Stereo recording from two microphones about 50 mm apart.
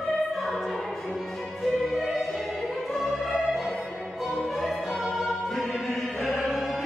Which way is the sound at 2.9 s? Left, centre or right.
Centre.